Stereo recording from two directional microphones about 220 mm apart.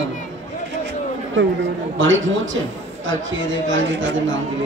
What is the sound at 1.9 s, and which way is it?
Speech, 60° right (ahead or behind).